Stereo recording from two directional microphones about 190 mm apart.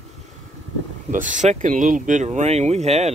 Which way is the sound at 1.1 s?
40° right (ahead or behind).